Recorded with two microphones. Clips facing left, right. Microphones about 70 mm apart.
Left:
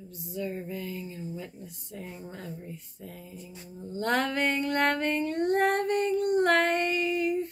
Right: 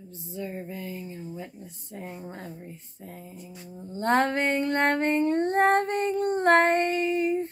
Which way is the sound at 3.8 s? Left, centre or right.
Right.